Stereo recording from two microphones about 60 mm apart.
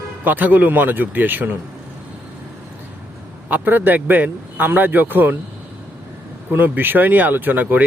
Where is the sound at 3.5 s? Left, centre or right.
Right.